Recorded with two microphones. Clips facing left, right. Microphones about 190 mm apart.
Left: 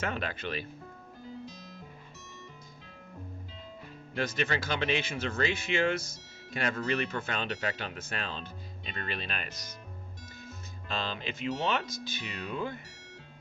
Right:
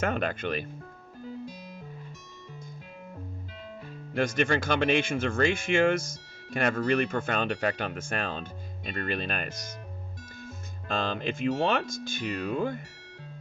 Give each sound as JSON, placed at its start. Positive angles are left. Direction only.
{"t": 0.0, "sound": "speech", "side_deg": -50}
{"t": 4.1, "sound": "speech", "side_deg": -50}
{"t": 10.8, "sound": "speech", "side_deg": -50}